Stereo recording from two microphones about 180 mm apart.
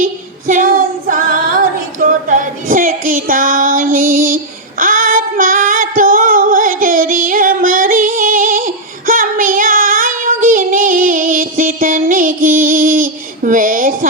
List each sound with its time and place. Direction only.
0.0 s female singing: 50° right (ahead or behind)